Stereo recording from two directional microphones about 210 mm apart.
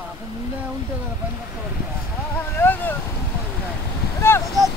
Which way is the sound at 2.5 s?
10° left (ahead or behind).